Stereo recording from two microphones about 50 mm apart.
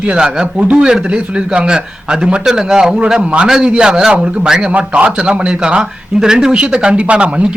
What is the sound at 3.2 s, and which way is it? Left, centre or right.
Speech, right.